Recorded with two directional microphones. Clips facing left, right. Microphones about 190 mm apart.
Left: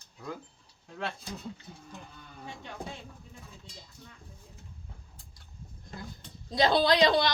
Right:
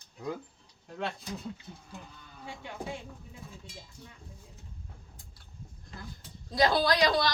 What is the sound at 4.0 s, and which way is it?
Speech, 10° right (ahead or behind).